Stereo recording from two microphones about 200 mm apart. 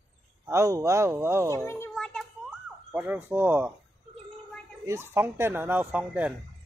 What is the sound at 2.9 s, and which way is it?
Speech, 5° right (ahead or behind).